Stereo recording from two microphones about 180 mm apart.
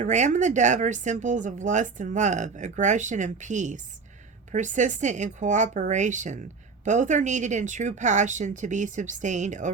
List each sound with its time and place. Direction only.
0.0 s speech: 40° right (ahead or behind)